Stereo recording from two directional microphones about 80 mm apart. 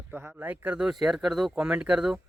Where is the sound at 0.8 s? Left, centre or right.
Centre.